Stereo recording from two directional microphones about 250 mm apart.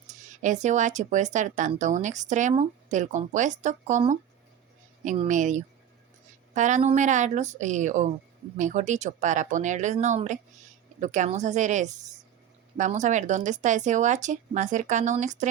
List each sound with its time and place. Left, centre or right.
0.1 s speech: right